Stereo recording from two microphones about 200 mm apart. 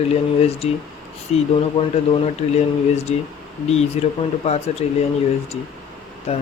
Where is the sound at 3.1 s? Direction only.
30° left (ahead or behind).